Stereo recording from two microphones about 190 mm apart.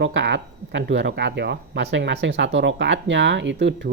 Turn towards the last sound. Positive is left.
turn(degrees=-70)  # may be behind; listen again after turning